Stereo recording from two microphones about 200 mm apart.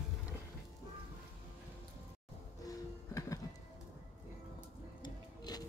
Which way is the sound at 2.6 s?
15° left (ahead or behind).